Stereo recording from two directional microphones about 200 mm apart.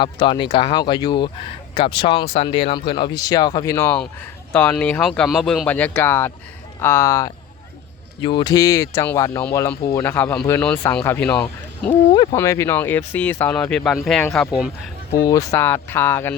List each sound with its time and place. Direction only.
0.0 s speech: 25° left (ahead or behind)
4.5 s speech: 5° left (ahead or behind)
12.1 s speech: 20° left (ahead or behind); by 14.3 s centre (ahead or behind)
15.3 s speech: 15° left (ahead or behind)